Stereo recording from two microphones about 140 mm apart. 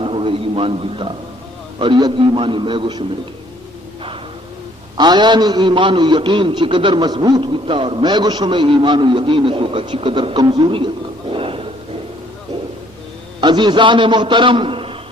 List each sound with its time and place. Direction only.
0.0 s a sound: 40° right (ahead or behind)
1.8 s a man's voice: 35° right (ahead or behind)
4.9 s a man's voice: 30° right (ahead or behind)
13.4 s a man's voice: 30° right (ahead or behind)